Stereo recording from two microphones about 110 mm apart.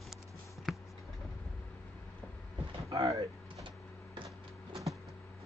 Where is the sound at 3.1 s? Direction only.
30° right (ahead or behind).